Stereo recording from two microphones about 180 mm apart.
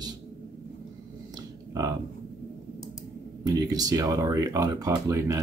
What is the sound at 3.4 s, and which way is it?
Speech, 20° right (ahead or behind).